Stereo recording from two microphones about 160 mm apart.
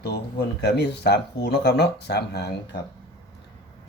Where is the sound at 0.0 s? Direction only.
90° left.